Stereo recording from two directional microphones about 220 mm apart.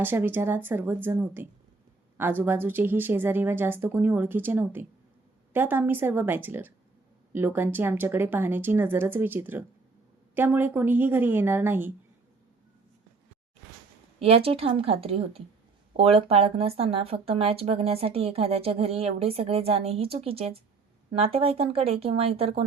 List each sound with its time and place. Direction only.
0.0 s speech: 10° right (ahead or behind)
14.2 s speech: 25° right (ahead or behind)